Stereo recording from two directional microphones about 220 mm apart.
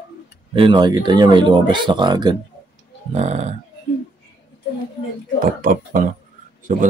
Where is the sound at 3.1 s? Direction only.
30° right (ahead or behind).